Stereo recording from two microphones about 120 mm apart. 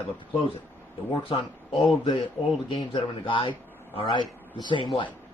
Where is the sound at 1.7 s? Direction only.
Centre (ahead or behind).